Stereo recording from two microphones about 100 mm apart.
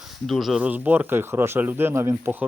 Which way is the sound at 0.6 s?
15° right (ahead or behind).